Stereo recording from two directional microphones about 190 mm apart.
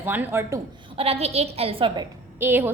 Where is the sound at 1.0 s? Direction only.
30° right (ahead or behind).